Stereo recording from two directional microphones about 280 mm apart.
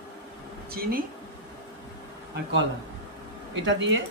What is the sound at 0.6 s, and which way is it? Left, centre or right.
Speech, right.